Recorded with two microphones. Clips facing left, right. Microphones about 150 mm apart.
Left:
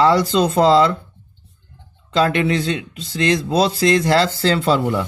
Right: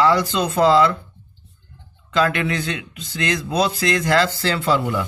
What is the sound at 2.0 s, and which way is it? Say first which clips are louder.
Speech: left 3 dB; 30° left (ahead or behind).